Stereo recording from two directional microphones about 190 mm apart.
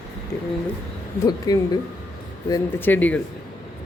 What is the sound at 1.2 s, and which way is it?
Speech, 20° left (ahead or behind).